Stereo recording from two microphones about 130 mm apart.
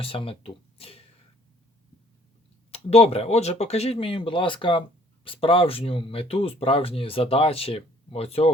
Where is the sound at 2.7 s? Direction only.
50° left (ahead or behind).